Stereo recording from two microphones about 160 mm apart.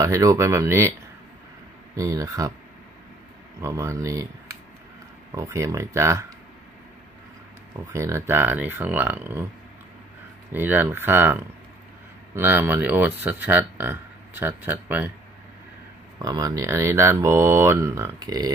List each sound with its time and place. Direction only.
0.0 s speech: 20° right (ahead or behind)
2.0 s speech: 20° right (ahead or behind)
3.6 s speech: 20° right (ahead or behind)
5.3 s speech: 20° right (ahead or behind)
7.8 s speech: 20° right (ahead or behind)
10.5 s speech: 15° right (ahead or behind)
16.2 s speech: 20° right (ahead or behind)